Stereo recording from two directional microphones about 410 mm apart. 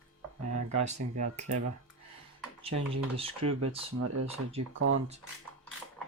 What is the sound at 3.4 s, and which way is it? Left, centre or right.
Speech, right.